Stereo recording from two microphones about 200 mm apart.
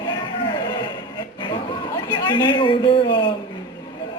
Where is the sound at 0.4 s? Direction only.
20° left (ahead or behind).